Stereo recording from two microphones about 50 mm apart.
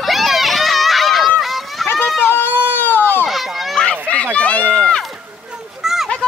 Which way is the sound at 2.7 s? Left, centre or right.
Left.